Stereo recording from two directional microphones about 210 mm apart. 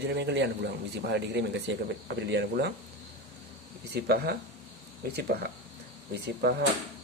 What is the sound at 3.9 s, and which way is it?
Speech, 50° right (ahead or behind).